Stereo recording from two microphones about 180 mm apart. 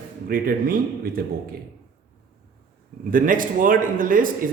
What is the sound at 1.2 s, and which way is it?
Speech, 55° right (ahead or behind).